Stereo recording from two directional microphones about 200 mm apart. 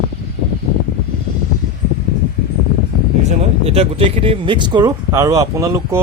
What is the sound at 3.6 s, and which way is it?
Speech, 30° right (ahead or behind).